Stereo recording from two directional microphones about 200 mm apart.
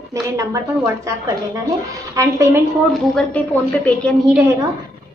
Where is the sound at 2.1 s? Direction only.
15° right (ahead or behind).